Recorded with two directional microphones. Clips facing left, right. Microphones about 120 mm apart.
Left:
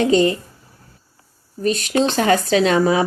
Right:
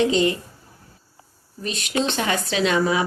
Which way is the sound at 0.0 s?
45° left (ahead or behind).